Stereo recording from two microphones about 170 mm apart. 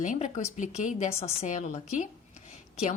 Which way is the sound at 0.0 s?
45° left (ahead or behind).